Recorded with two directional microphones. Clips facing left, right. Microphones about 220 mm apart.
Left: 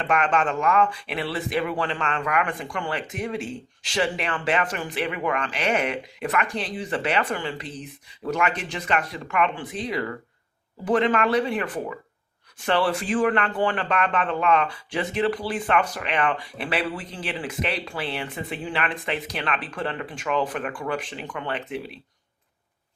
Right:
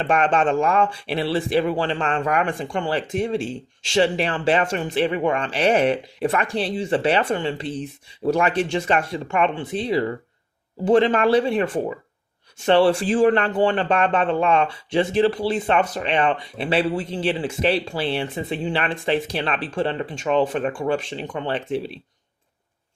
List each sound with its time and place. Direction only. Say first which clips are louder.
0.0 s speech: right 4 dB; 30° right (ahead or behind)